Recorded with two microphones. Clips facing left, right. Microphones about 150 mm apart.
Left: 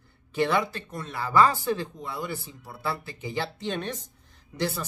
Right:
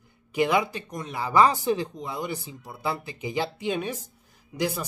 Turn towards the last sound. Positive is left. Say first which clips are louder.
# right 2 dB
turn(degrees=-10)  # may be behind; listen again after turning